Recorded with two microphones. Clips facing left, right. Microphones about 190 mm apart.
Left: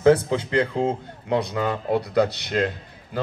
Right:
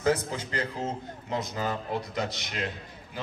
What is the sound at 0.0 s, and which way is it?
A man's voice, 60° left (ahead or behind).